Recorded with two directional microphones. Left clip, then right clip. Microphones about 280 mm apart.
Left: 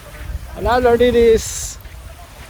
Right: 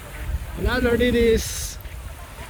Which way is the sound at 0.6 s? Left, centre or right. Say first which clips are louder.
Left 8 dB; centre.